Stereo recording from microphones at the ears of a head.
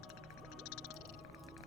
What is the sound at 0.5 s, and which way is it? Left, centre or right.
Frog, left.